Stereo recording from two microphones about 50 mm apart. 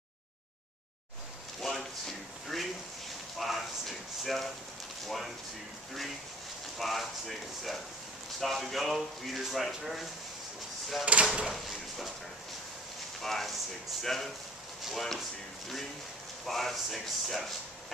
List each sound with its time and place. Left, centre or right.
1.6 s a sound: centre
5.0 s speech: centre
6.8 s speech: centre
11.1 s speech: right
11.5 s a sound: centre
13.2 s speech: centre
16.4 s speech: centre